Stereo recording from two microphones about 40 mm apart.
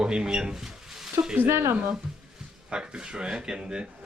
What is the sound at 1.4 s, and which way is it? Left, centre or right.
Speech, right.